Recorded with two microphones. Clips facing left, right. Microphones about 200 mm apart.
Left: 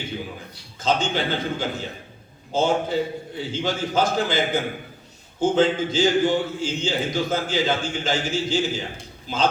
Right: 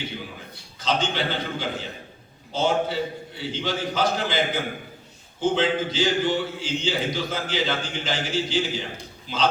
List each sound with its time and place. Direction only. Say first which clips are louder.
0.8 s a man's voice: left 2 dB; 45° left (ahead or behind)